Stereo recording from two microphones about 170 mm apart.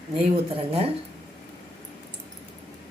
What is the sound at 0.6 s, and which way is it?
Speech, 35° right (ahead or behind).